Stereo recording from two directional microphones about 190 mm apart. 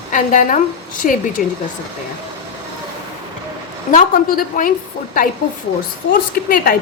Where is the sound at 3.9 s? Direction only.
45° left (ahead or behind).